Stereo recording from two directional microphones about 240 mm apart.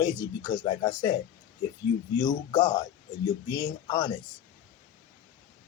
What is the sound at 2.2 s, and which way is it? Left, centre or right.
Speech, centre.